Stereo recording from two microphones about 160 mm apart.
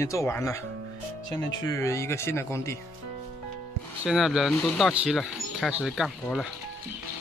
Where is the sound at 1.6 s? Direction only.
20° left (ahead or behind).